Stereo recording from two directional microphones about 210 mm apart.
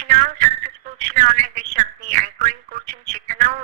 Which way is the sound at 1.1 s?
40° right (ahead or behind).